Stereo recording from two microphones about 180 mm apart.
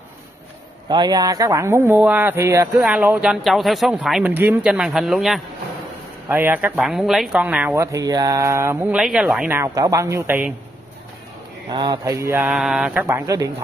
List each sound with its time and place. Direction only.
0.8 s speech: 25° right (ahead or behind)
11.7 s speech: 25° right (ahead or behind)
12.4 s speech: 5° right (ahead or behind)